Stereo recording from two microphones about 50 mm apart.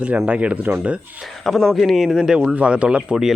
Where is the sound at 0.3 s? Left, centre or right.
Right.